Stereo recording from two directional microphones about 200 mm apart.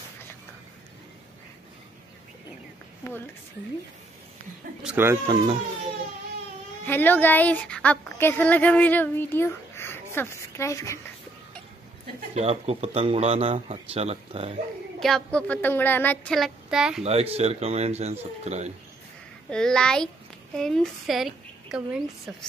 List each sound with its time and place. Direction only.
3.0 s speech: 15° left (ahead or behind)
4.8 s speech: 10° right (ahead or behind)
6.8 s speech: 10° left (ahead or behind)
12.4 s speech: 30° right (ahead or behind)
15.0 s child singing: centre (ahead or behind)
17.0 s speech: 30° right (ahead or behind)
19.5 s child singing: 5° left (ahead or behind)
20.5 s a woman's voice: centre (ahead or behind)